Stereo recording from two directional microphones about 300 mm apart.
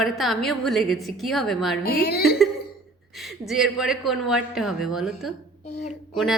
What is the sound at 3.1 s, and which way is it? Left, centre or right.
A woman's voice, centre.